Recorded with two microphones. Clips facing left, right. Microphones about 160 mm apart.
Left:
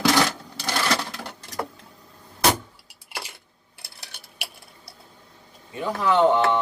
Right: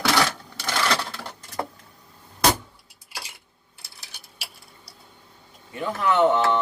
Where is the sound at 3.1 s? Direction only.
60° left (ahead or behind).